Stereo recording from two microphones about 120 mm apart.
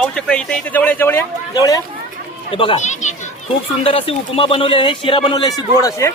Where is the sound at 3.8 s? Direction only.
50° left (ahead or behind); by 6.1 s 25° left (ahead or behind).